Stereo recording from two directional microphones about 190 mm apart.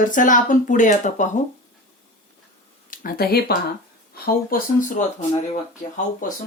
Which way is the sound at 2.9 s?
50° left (ahead or behind).